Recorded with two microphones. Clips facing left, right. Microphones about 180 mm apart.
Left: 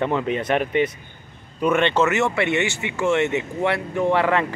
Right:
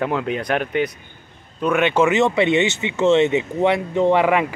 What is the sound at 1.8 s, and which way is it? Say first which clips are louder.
Speech: right 5 dB; 10° right (ahead or behind).